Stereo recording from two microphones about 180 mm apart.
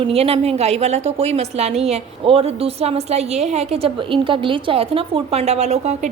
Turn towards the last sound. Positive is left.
turn(degrees=-40)  # may be behind; listen again after turning